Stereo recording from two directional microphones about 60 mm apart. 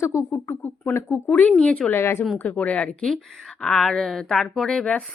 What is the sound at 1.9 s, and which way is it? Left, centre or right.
Speech, left.